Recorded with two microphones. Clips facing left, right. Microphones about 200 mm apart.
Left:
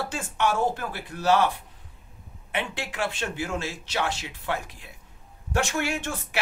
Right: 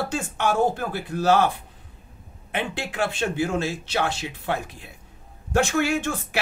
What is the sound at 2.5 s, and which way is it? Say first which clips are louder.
Speech: right 3 dB; 35° right (ahead or behind).